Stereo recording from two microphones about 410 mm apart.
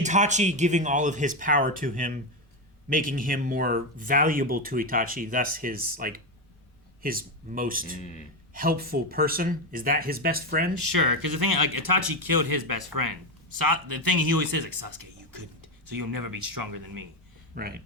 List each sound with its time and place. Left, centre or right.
0.0 s speech: centre
10.9 s speech: right
17.5 s speech: right